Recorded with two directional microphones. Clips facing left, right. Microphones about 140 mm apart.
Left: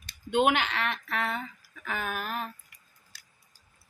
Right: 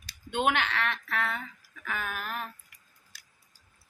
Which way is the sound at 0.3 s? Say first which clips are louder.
Left 3 dB; 15° left (ahead or behind).